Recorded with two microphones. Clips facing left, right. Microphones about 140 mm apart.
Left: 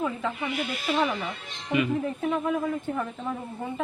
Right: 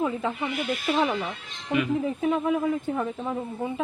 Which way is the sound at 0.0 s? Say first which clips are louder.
Right 2 dB; 20° right (ahead or behind).